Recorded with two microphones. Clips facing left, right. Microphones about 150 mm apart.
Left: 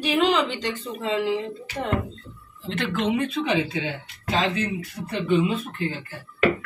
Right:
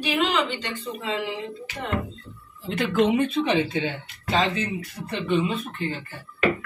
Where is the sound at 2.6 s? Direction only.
5° right (ahead or behind).